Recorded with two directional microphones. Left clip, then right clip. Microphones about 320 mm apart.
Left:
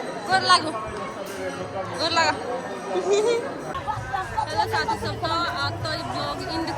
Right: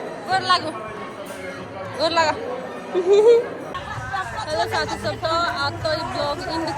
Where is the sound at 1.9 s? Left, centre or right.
Centre.